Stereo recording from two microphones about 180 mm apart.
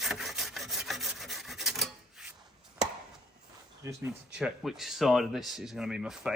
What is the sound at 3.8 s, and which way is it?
Speech, 20° right (ahead or behind).